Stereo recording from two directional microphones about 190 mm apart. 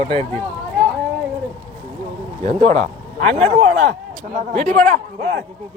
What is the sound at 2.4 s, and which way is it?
Speech, 35° right (ahead or behind).